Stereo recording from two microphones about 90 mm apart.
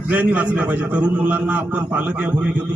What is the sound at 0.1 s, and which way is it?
A man's voice, 20° right (ahead or behind).